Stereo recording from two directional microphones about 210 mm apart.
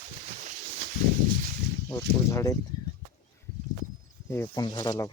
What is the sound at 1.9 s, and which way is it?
Speech, 15° left (ahead or behind).